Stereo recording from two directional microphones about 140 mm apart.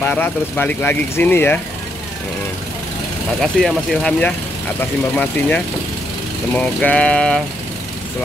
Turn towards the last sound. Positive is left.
turn(degrees=5)  # may be behind; listen again after turning